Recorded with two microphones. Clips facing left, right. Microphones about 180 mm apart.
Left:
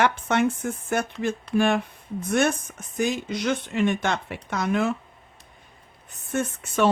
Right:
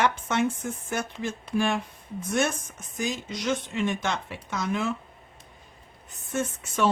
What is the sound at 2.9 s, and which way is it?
Speech, 60° left (ahead or behind).